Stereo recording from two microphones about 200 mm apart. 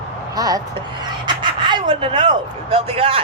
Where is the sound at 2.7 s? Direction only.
30° right (ahead or behind).